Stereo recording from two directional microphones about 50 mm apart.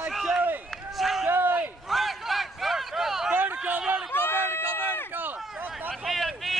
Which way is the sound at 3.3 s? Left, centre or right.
Right.